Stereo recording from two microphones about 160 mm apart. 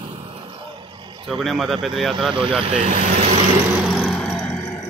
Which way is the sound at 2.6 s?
40° right (ahead or behind).